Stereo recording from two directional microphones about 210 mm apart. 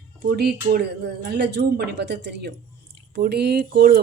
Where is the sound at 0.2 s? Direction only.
50° right (ahead or behind).